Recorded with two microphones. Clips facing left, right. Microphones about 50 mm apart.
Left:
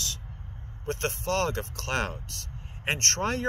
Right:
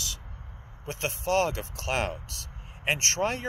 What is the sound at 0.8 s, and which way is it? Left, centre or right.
Speech, centre.